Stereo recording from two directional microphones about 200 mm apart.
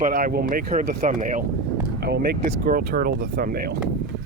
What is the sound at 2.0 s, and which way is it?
Speech, 55° right (ahead or behind).